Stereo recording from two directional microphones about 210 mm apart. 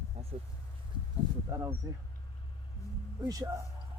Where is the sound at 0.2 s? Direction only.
30° right (ahead or behind).